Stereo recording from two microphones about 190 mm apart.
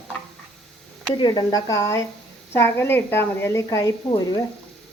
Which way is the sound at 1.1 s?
25° left (ahead or behind).